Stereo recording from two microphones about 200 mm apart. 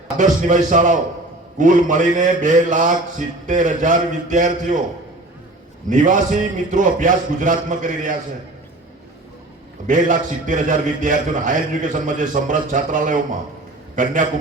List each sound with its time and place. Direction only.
0.2 s a man's voice: 40° right (ahead or behind)
5.9 s a man's voice: 40° right (ahead or behind)
9.8 s a man's voice: 40° right (ahead or behind)